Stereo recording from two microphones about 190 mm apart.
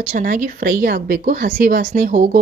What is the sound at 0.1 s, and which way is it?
Speech, 45° right (ahead or behind).